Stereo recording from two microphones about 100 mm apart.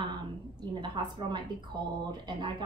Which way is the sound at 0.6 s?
50° right (ahead or behind).